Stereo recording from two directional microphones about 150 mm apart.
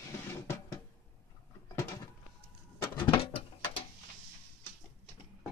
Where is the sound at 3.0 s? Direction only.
35° left (ahead or behind).